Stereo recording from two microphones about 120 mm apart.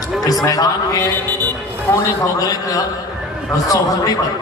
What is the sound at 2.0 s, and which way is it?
A man's voice, 30° left (ahead or behind).